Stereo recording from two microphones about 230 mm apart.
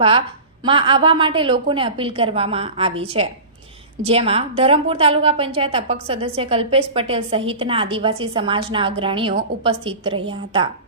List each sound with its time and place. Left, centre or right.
0.0 s a woman's voice: right